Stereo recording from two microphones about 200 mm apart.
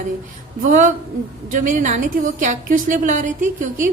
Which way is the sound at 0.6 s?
40° right (ahead or behind).